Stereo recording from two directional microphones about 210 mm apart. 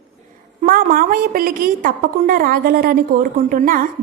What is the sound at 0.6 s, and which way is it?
A woman's voice, 45° right (ahead or behind).